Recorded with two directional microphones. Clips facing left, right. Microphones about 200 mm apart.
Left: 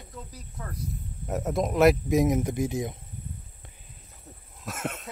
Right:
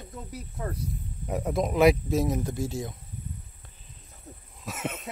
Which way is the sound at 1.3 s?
Centre (ahead or behind).